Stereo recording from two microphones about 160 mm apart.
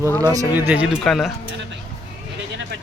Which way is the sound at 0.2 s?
20° right (ahead or behind).